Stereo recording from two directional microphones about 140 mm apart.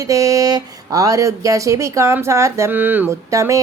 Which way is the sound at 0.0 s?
25° right (ahead or behind).